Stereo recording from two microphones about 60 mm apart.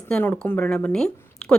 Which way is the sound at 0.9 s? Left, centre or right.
Centre.